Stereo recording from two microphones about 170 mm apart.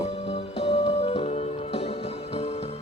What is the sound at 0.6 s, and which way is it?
Music, 35° left (ahead or behind).